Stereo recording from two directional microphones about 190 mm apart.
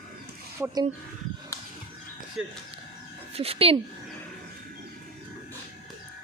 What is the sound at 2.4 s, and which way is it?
Speech, centre (ahead or behind).